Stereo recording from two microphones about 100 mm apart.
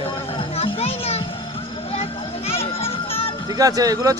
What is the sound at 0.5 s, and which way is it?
Music, 80° left.